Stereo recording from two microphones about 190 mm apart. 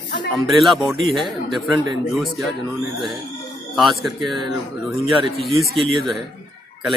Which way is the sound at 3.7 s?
Centre (ahead or behind).